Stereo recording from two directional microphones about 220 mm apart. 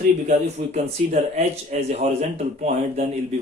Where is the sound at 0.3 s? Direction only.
30° right (ahead or behind).